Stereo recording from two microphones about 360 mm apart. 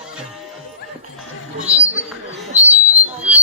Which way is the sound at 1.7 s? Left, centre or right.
Centre.